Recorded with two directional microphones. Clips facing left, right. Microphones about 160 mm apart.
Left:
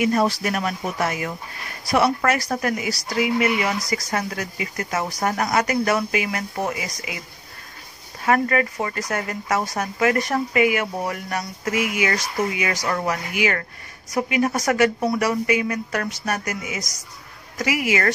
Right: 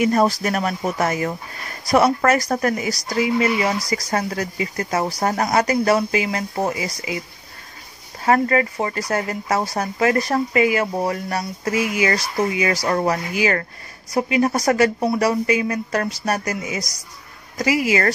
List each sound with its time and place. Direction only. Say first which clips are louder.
0.0 s speech: right 2 dB; 40° right (ahead or behind)
8.3 s speech: right 2 dB; 30° right (ahead or behind)